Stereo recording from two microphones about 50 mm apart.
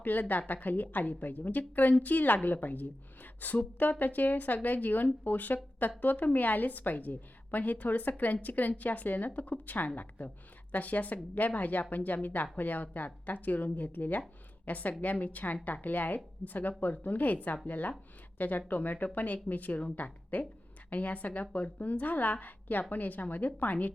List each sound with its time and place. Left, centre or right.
0.0 s a woman's voice: left